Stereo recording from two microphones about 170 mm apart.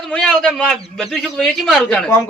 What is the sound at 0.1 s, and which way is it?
Speech, 5° left (ahead or behind).